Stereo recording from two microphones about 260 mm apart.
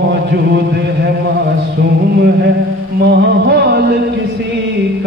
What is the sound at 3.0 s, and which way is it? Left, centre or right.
Music, right.